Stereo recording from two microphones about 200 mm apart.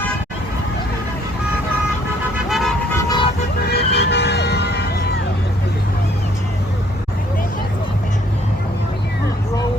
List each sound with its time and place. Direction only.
2.5 s vehicle: centre (ahead or behind)
3.0 s vehicle: 20° left (ahead or behind)
3.7 s vehicle: 55° left (ahead or behind)